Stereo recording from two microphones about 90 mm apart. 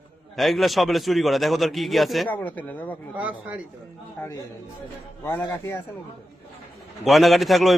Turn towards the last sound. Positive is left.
turn(degrees=0)  # may be behind; listen again after turning